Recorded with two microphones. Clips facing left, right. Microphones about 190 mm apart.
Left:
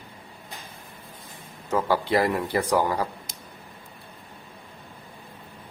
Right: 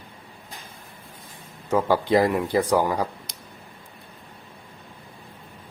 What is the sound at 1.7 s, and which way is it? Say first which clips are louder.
Speech: right 3 dB; 15° right (ahead or behind).